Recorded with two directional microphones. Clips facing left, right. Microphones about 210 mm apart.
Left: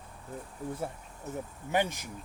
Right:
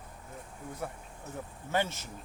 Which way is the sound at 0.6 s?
35° left (ahead or behind).